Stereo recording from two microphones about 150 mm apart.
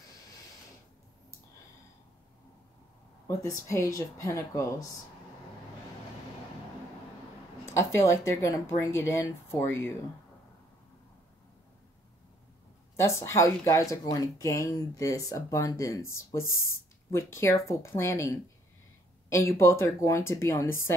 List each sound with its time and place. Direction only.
3.3 s speech: 20° left (ahead or behind)
7.6 s speech: 20° left (ahead or behind)
12.9 s speech: 20° left (ahead or behind)